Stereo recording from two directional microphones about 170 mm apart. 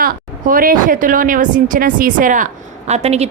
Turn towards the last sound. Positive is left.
turn(degrees=-40)  # may be behind; listen again after turning